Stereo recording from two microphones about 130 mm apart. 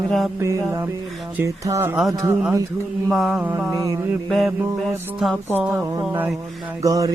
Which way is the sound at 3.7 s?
25° right (ahead or behind).